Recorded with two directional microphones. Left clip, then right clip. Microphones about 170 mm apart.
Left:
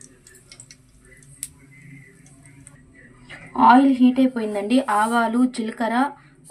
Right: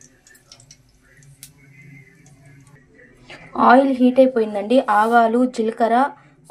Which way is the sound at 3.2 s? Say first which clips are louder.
Right 1 dB; 30° right (ahead or behind).